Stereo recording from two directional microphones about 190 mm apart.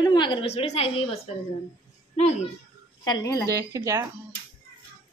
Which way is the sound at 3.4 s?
15° right (ahead or behind).